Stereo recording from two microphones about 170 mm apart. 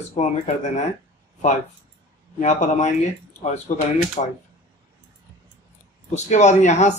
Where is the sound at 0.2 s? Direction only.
45° left (ahead or behind).